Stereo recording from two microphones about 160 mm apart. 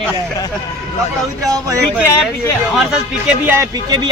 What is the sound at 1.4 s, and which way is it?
Speech, 20° right (ahead or behind).